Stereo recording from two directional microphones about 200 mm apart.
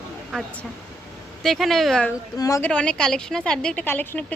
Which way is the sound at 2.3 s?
15° left (ahead or behind).